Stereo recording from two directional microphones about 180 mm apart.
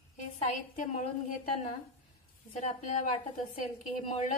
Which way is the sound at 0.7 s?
45° left (ahead or behind).